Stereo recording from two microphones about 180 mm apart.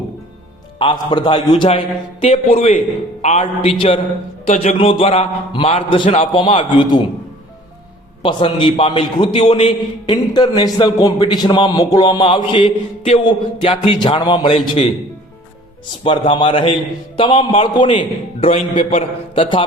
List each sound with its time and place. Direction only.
0.8 s a man's voice: 25° left (ahead or behind)
8.2 s a man's voice: 25° left (ahead or behind)
16.0 s a man's voice: 30° left (ahead or behind)